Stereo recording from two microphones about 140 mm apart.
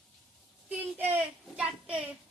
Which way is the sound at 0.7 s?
10° right (ahead or behind).